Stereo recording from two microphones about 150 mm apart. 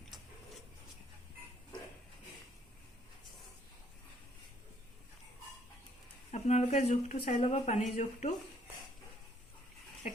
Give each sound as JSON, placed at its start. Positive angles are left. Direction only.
{"t": 6.3, "sound": "speech", "side_deg": 50}